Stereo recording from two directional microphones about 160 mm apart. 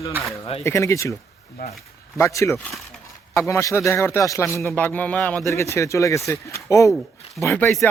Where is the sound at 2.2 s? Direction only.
20° left (ahead or behind).